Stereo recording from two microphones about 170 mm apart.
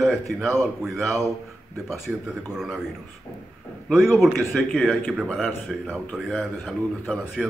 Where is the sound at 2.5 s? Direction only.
5° right (ahead or behind).